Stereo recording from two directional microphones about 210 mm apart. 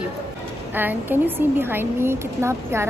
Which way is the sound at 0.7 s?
10° right (ahead or behind).